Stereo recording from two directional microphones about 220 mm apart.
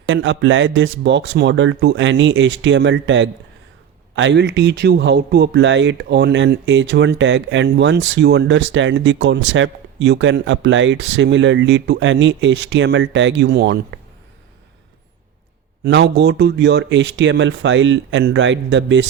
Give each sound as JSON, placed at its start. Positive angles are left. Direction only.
{"t": 0.1, "sound": "speech", "side_deg": -55}
{"t": 15.8, "sound": "speech", "side_deg": -50}